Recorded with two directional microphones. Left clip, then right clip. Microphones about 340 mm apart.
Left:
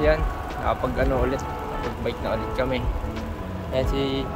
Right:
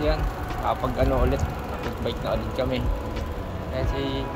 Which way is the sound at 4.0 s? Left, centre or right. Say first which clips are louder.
Left 3 dB; left.